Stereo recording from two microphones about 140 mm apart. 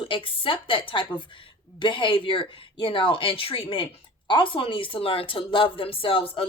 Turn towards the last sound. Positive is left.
turn(degrees=40)  # may be behind; listen again after turning